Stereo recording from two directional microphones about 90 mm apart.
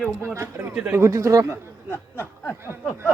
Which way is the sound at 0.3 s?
30° right (ahead or behind).